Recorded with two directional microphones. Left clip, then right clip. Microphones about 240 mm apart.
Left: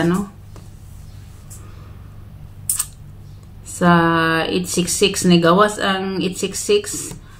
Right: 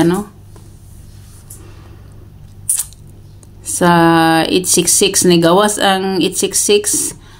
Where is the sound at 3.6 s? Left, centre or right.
Right.